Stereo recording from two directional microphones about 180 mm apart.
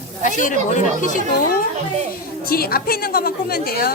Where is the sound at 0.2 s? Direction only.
45° left (ahead or behind).